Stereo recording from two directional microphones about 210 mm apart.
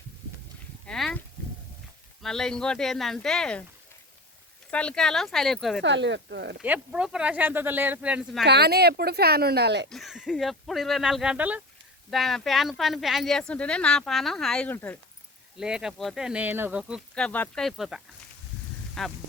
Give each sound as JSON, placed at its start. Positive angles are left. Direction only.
{"t": 0.9, "sound": "a sound", "side_deg": 5}
{"t": 2.2, "sound": "speech", "side_deg": 0}
{"t": 4.7, "sound": "speech", "side_deg": 5}
{"t": 5.8, "sound": "speech", "side_deg": -60}
{"t": 6.6, "sound": "speech", "side_deg": -5}
{"t": 8.4, "sound": "speech", "side_deg": -50}
{"t": 9.9, "sound": "speech", "side_deg": 0}
{"t": 15.5, "sound": "speech", "side_deg": -5}